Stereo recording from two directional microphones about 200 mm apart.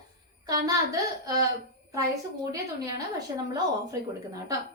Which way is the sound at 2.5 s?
15° right (ahead or behind).